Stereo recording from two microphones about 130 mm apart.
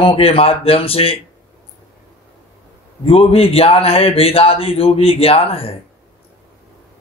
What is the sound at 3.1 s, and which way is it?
Speech, 45° left (ahead or behind).